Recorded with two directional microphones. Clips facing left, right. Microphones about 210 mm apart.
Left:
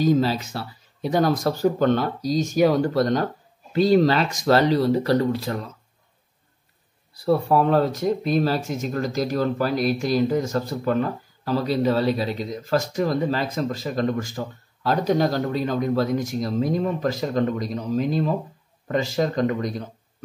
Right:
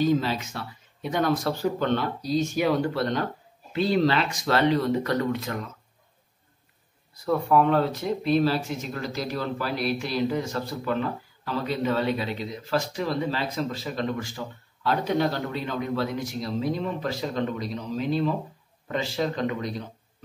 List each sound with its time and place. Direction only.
0.0 s speech: 40° left (ahead or behind)
7.2 s speech: 35° left (ahead or behind)